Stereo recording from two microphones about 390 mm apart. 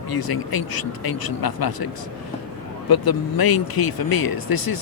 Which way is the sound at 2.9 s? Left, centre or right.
Left.